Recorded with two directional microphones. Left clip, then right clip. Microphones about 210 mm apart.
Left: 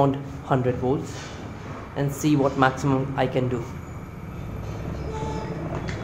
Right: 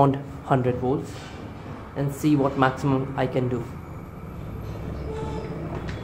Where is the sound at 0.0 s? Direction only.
20° right (ahead or behind).